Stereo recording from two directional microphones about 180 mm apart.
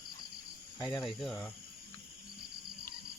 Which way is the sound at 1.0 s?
Centre (ahead or behind).